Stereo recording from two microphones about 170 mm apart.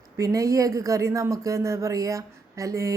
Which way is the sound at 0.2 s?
20° right (ahead or behind).